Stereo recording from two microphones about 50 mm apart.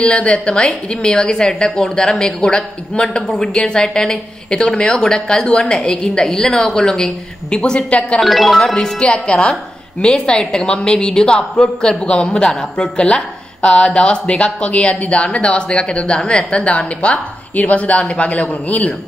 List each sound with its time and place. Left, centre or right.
0.0 s a woman's voice: left; by 7.1 s centre
7.5 s a woman's voice: centre
8.2 s a woman's voice: centre; by 18.9 s left